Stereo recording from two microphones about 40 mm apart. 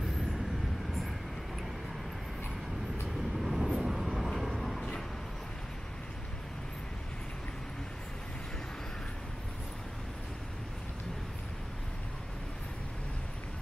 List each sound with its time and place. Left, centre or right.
3.3 s vehicle: centre
4.7 s vehicle: left